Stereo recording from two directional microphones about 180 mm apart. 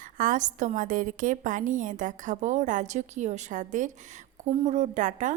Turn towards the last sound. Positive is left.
turn(degrees=-45)  # may be behind; listen again after turning